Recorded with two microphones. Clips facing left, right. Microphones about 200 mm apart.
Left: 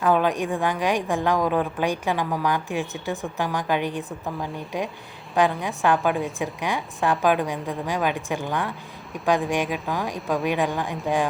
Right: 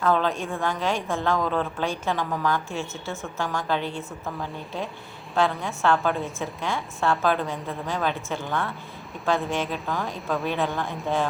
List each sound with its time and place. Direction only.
0.0 s a woman's voice: 15° left (ahead or behind)